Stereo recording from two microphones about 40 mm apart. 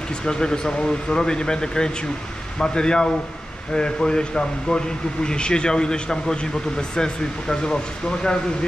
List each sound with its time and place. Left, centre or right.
0.2 s speech: centre